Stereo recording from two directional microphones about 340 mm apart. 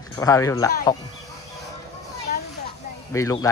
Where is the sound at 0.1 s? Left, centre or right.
Centre.